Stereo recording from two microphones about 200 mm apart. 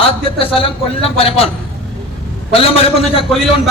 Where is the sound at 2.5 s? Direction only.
30° left (ahead or behind).